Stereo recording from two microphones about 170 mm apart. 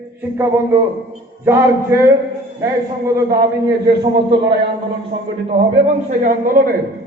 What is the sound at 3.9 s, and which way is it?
Speech, 80° right.